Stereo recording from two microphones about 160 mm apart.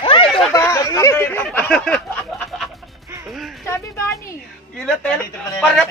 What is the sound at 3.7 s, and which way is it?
Speech, 20° left (ahead or behind).